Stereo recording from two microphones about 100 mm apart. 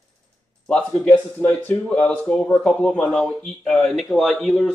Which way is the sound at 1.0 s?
15° left (ahead or behind).